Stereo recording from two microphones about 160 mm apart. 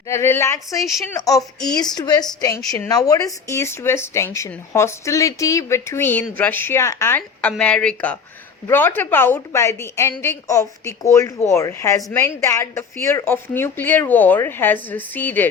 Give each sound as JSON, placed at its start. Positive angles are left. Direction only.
{"t": 0.1, "sound": "a woman's voice", "side_deg": 15}